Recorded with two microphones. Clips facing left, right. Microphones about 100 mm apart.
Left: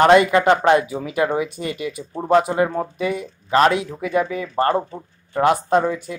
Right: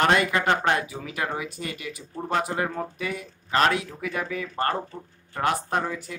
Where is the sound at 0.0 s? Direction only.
15° left (ahead or behind).